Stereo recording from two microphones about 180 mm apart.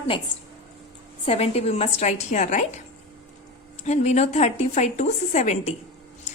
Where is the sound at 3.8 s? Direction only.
40° left (ahead or behind).